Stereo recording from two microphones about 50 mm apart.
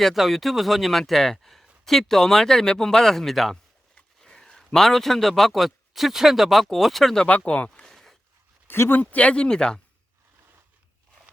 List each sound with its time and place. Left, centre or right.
0.0 s speech: centre
7.3 s speech: left
7.8 s a sound: centre
8.6 s speech: left
9.0 s speech: left